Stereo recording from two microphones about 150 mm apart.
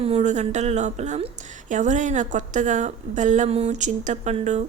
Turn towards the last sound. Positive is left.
turn(degrees=-50)  # may be behind; listen again after turning